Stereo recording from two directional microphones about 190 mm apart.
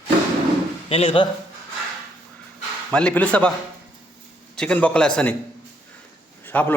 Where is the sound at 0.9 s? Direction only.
30° left (ahead or behind).